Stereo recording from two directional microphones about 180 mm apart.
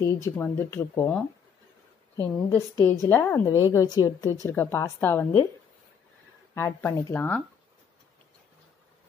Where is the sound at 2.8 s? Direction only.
10° left (ahead or behind).